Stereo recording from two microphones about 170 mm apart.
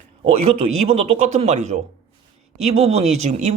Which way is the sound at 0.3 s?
35° right (ahead or behind).